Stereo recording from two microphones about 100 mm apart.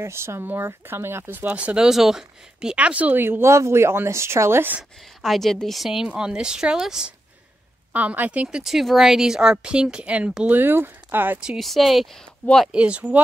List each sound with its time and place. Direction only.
0.0 s speech: 25° right (ahead or behind)
5.2 s a woman's voice: centre (ahead or behind)
10.6 s speech: 20° right (ahead or behind)
11.3 s a woman's voice: 5° right (ahead or behind)
12.7 s a woman's voice: 10° right (ahead or behind)